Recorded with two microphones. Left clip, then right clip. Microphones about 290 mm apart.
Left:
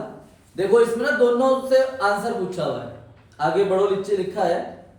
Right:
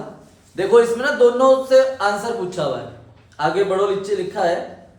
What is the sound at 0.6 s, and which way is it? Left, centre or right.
A man's voice, centre.